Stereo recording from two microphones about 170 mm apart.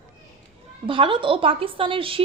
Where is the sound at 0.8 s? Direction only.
30° right (ahead or behind).